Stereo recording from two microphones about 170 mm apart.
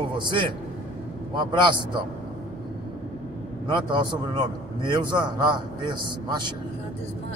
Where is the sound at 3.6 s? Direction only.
30° right (ahead or behind).